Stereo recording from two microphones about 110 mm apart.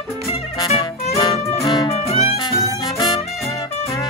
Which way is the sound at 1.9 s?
70° left (ahead or behind).